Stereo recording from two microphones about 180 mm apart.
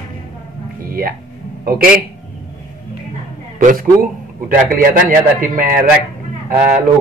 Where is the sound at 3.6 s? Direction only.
50° right (ahead or behind).